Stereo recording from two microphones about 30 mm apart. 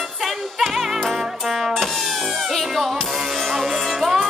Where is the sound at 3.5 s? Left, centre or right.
Centre.